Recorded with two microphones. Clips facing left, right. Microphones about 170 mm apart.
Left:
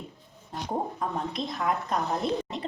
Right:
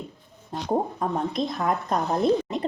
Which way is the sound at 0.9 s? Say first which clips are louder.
Right 5 dB; 40° right (ahead or behind).